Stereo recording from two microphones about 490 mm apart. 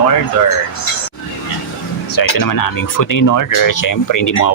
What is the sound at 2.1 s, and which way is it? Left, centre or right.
Speech, left.